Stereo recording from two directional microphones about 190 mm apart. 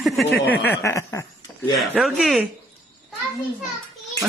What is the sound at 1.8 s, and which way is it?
Speech, centre (ahead or behind).